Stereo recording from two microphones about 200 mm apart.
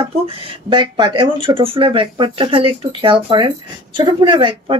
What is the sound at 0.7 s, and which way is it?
Speech, 20° right (ahead or behind).